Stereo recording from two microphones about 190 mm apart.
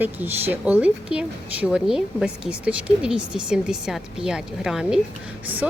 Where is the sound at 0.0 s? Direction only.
10° right (ahead or behind).